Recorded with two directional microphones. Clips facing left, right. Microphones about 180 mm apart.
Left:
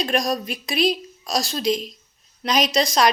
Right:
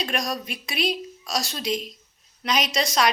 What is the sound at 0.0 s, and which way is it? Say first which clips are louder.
A woman's voice: left 5 dB; 35° left (ahead or behind).